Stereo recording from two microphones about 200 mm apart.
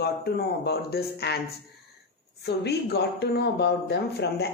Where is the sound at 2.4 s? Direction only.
55° left (ahead or behind).